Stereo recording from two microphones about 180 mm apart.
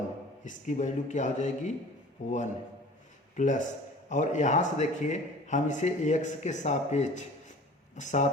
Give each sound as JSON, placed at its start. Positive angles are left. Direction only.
{"t": 0.4, "sound": "a man's voice", "side_deg": 40}